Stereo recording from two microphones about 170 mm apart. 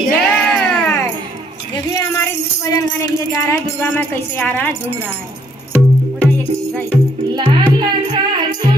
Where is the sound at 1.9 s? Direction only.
20° left (ahead or behind).